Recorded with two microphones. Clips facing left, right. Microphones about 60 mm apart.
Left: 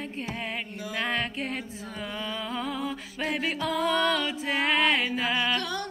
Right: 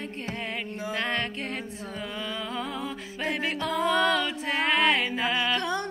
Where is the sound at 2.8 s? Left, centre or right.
Right.